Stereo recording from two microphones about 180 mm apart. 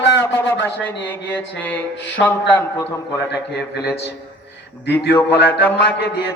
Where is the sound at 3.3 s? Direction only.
65° left (ahead or behind).